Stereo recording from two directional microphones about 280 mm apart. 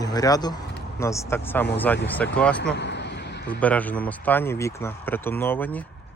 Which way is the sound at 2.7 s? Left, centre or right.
Left.